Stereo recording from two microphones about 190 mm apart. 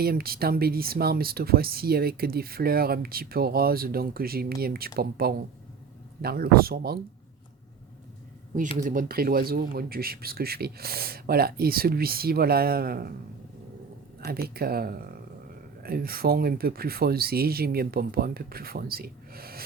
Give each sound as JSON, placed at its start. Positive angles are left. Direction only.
{"t": 0.0, "sound": "speech", "side_deg": -55}
{"t": 8.8, "sound": "speech", "side_deg": -45}
{"t": 14.3, "sound": "speech", "side_deg": -55}